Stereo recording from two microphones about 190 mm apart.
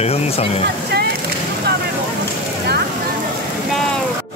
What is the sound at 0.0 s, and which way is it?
Speech, 30° left (ahead or behind).